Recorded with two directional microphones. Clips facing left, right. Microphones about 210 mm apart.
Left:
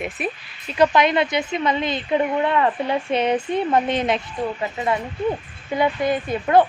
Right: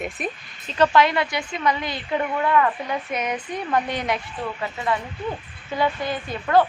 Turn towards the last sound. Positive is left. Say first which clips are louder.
# left 3 dB
turn(degrees=20)  # may be behind; listen again after turning